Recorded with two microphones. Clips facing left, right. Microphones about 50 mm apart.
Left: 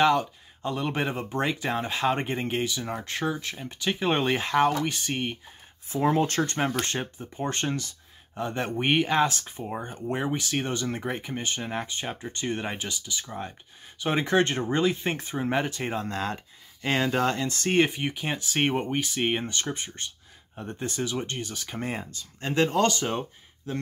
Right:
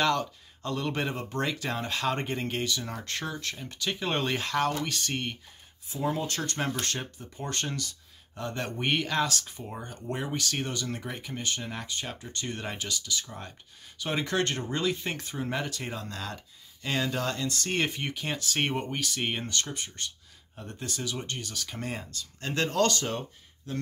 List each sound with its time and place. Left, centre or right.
0.0 s speech: centre
5.9 s speech: left
6.4 s speech: left
10.7 s speech: left
17.8 s speech: centre